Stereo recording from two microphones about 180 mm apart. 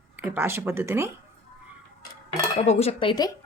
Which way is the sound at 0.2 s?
10° right (ahead or behind).